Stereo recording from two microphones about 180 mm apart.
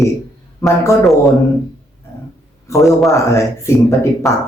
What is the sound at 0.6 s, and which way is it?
Speech, 15° left (ahead or behind).